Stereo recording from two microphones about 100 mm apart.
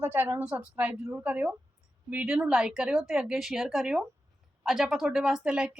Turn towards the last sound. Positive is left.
turn(degrees=-10)  # may be behind; listen again after turning